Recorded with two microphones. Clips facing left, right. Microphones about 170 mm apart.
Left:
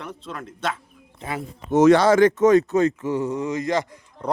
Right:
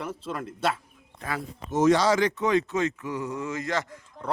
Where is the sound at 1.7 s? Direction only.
65° left (ahead or behind).